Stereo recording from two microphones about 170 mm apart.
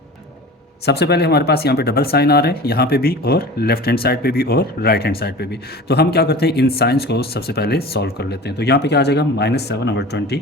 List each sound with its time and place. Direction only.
0.9 s speech: 75° left (ahead or behind)